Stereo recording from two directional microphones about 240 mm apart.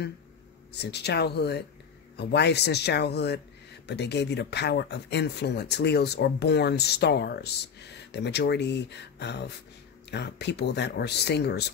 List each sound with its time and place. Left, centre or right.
0.7 s speech: left